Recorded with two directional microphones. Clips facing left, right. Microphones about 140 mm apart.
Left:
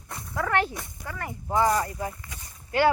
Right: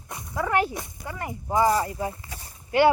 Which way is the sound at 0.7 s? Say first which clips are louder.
Right 2 dB; 20° right (ahead or behind).